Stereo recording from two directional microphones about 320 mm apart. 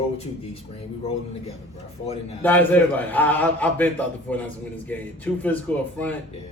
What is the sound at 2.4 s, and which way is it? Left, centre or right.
Speech, centre.